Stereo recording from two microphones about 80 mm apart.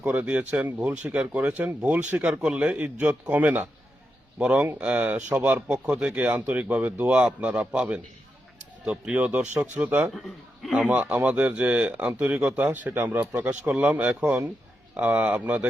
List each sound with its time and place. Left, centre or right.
0.0 s speech: centre
10.1 s a man's voice: centre
10.7 s speech: centre